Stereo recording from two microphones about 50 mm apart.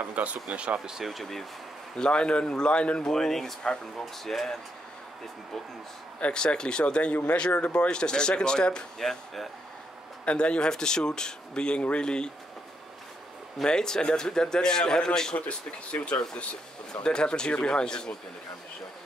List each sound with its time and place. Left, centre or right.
0.0 s speech: right
0.8 s speech: centre
2.0 s speech: centre
3.1 s speech: centre
6.1 s speech: centre
9.0 s speech: centre
10.2 s speech: left
13.7 s speech: centre
15.3 s speech: left